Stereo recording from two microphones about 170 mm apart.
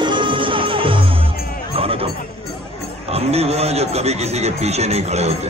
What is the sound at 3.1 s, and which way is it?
A man's voice, 35° right (ahead or behind).